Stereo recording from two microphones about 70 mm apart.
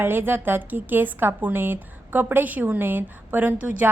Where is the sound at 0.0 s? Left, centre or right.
Right.